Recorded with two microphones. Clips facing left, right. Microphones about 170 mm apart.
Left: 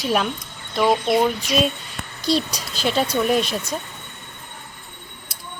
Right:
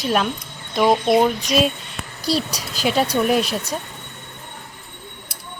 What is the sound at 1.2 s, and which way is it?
Speech, centre (ahead or behind).